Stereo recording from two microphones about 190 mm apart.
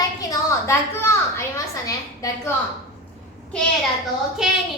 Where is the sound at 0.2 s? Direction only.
15° left (ahead or behind).